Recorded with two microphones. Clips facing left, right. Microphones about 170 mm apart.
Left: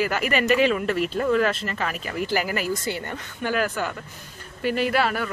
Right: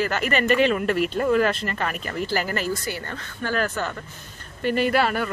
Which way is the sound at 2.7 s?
20° left (ahead or behind).